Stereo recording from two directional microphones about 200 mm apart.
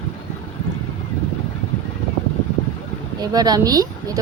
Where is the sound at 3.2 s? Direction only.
20° right (ahead or behind).